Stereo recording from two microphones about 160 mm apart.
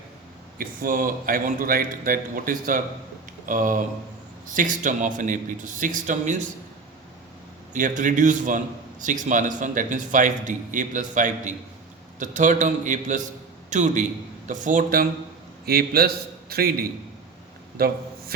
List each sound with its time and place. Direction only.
0.6 s a man's voice: 60° right (ahead or behind)
7.7 s a man's voice: 50° right (ahead or behind)
15.6 s a man's voice: 70° right (ahead or behind)
17.7 s a sound: 70° right (ahead or behind)